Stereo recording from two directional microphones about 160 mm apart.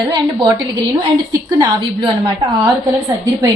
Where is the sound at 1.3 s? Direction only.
25° right (ahead or behind).